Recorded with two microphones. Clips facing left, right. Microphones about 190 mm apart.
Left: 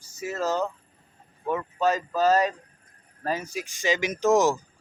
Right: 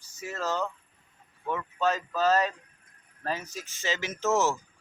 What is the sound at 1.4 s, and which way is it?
Speech, 10° left (ahead or behind).